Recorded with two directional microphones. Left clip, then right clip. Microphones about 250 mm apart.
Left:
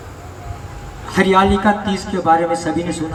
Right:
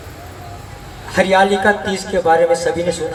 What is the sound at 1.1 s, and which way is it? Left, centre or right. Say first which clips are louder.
A man's voice: right 1 dB; right.